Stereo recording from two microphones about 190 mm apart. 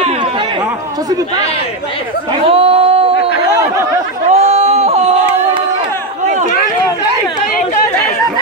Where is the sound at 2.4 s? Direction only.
30° right (ahead or behind).